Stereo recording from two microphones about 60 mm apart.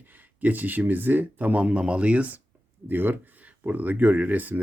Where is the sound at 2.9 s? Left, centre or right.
Right.